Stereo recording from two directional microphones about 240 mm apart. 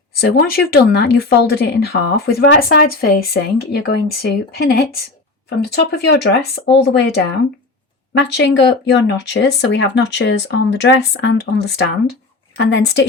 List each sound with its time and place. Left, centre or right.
0.2 s speech: left
8.2 s speech: left